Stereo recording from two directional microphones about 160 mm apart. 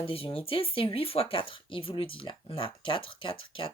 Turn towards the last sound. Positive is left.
turn(degrees=35)  # may be behind; listen again after turning